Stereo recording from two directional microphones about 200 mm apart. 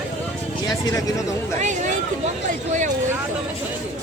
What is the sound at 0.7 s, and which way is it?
Speech, 15° left (ahead or behind).